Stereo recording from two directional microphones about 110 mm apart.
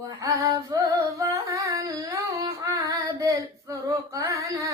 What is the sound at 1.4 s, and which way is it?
Humming, 30° right (ahead or behind).